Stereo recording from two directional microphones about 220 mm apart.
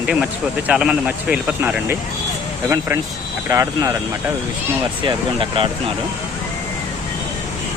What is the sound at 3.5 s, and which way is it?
Speech, 15° right (ahead or behind).